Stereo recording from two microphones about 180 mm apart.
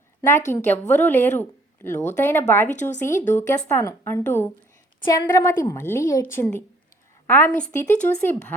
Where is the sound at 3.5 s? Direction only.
15° left (ahead or behind).